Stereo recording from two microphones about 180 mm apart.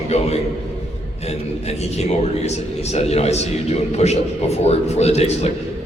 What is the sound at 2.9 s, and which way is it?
A man's voice, 35° left (ahead or behind).